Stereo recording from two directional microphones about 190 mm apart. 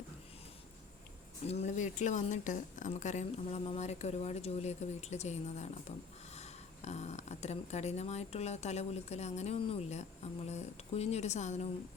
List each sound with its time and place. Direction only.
1.5 s speech: 35° left (ahead or behind)